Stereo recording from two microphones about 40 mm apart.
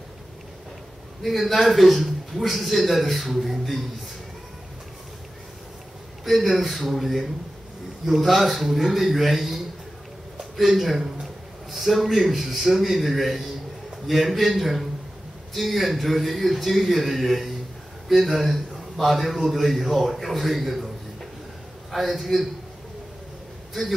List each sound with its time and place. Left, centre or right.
1.2 s a man's voice: centre
6.2 s a man's voice: centre
21.9 s a man's voice: centre